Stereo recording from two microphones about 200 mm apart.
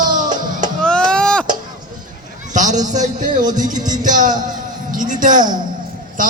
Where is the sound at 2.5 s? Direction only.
40° right (ahead or behind).